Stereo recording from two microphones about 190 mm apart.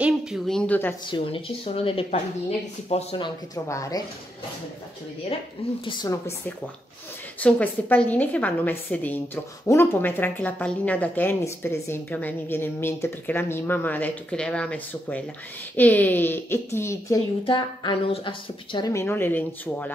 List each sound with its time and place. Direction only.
0.0 s speech: 5° right (ahead or behind)
1.0 s speech: 25° left (ahead or behind)
5.9 s speech: 20° left (ahead or behind)
7.3 s a woman's voice: 10° left (ahead or behind)
17.5 s a woman's voice: 25° left (ahead or behind); by 19.9 s 10° left (ahead or behind)